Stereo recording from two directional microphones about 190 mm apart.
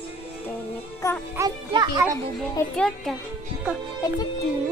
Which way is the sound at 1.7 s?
25° right (ahead or behind).